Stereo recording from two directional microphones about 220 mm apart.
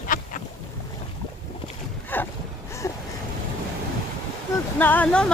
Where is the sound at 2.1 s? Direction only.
10° left (ahead or behind).